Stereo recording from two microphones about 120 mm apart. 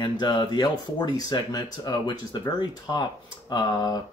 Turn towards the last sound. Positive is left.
turn(degrees=35)  # may be behind; listen again after turning